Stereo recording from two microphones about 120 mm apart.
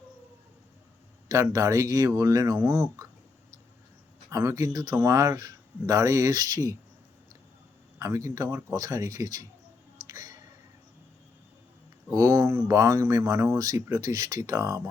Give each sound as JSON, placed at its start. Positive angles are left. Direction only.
{"t": 1.3, "sound": "speech", "side_deg": -30}
{"t": 4.3, "sound": "speech", "side_deg": -25}
{"t": 7.9, "sound": "speech", "side_deg": -25}
{"t": 10.1, "sound": "a sound", "side_deg": -30}
{"t": 12.1, "sound": "speech", "side_deg": -25}